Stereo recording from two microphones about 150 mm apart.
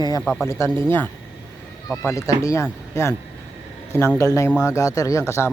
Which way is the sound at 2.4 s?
20° left (ahead or behind).